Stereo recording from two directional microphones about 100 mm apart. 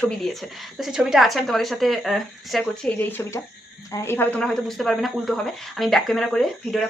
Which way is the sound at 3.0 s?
20° left (ahead or behind).